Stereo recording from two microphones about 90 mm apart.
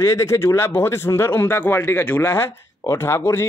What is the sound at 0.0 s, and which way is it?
Speech, 35° left (ahead or behind).